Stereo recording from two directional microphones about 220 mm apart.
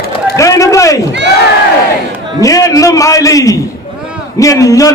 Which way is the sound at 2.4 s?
15° left (ahead or behind).